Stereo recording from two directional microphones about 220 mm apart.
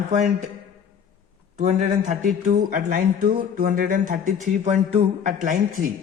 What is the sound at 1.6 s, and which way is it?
Speech, 35° right (ahead or behind).